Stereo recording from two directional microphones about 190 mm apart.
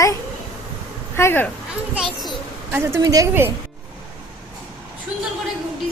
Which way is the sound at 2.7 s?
15° right (ahead or behind).